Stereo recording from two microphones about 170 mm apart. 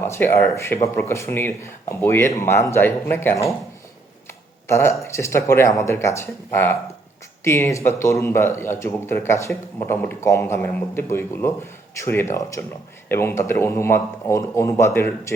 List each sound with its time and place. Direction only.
0.0 s speech: 15° left (ahead or behind)
4.3 s a sound: 15° left (ahead or behind)
5.1 s speech: 15° left (ahead or behind)